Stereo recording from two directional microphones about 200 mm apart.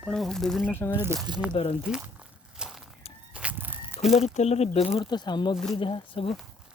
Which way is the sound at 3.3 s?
5° right (ahead or behind).